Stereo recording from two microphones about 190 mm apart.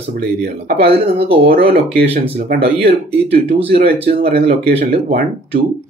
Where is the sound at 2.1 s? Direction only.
30° right (ahead or behind).